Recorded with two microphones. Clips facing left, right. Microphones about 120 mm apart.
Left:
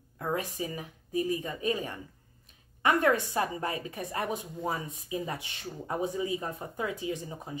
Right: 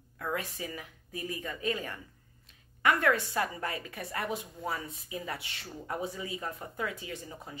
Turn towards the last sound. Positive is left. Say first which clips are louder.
# left 6 dB
turn(degrees=15)  # may be behind; listen again after turning